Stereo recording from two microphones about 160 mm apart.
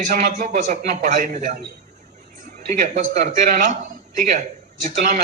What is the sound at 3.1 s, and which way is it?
Speech, 60° right (ahead or behind).